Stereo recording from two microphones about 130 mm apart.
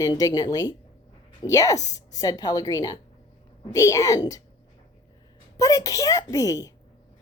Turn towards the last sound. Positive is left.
turn(degrees=25)  # may be behind; listen again after turning